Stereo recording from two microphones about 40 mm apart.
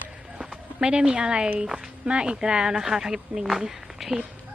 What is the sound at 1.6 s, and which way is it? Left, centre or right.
Speech, centre.